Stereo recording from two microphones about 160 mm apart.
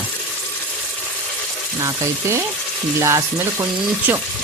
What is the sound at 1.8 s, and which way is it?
Speech, 15° right (ahead or behind).